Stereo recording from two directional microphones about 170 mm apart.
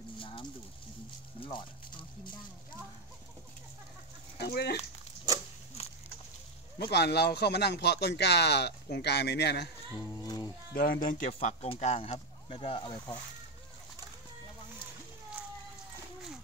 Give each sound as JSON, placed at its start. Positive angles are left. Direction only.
{"t": 0.2, "sound": "a sound", "side_deg": 30}
{"t": 1.4, "sound": "speech", "side_deg": 30}
{"t": 4.4, "sound": "speech", "side_deg": 70}
{"t": 5.8, "sound": "a sound", "side_deg": 35}
{"t": 6.8, "sound": "speech", "side_deg": 75}
{"t": 9.9, "sound": "music", "side_deg": 25}
{"t": 10.7, "sound": "speech", "side_deg": 55}